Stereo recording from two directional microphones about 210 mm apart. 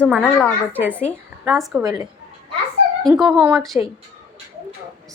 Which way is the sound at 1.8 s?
15° right (ahead or behind).